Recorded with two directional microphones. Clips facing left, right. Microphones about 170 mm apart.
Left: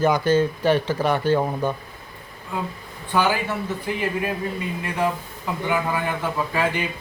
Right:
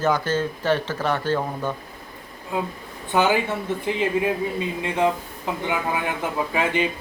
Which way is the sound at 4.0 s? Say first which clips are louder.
Right 4 dB; 20° right (ahead or behind).